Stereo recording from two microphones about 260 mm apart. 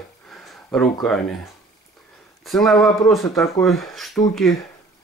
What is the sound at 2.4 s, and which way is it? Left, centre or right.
Speech, centre.